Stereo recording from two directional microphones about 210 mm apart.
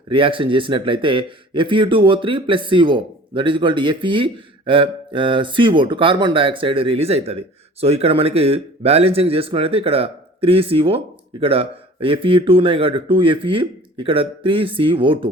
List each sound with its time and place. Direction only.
0.1 s speech: 25° right (ahead or behind)